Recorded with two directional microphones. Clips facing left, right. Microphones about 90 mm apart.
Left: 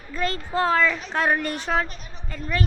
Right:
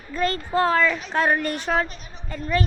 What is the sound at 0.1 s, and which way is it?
A woman's voice, 45° right (ahead or behind).